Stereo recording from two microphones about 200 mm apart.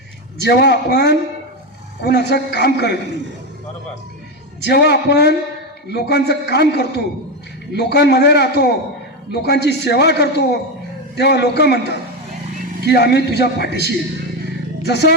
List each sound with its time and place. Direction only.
0.4 s a man's voice: 55° left (ahead or behind)
4.6 s a man's voice: 55° left (ahead or behind)
14.8 s a man's voice: 55° left (ahead or behind)